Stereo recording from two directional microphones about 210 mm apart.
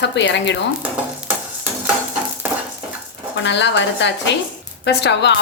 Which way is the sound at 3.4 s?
55° left (ahead or behind).